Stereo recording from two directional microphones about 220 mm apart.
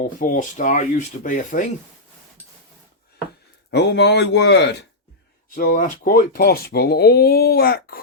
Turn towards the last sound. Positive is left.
turn(degrees=45)  # may be behind; listen again after turning